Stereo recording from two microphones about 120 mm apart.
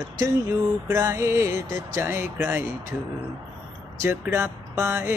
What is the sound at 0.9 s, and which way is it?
Mantra, 25° right (ahead or behind).